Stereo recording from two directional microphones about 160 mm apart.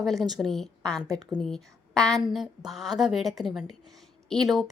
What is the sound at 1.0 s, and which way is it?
Speech, 20° right (ahead or behind).